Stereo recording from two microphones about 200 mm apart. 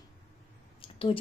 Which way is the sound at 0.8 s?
25° left (ahead or behind).